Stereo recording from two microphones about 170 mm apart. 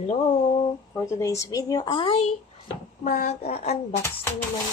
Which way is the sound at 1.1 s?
15° left (ahead or behind).